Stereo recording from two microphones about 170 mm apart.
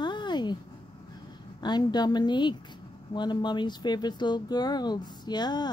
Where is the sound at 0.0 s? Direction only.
25° left (ahead or behind).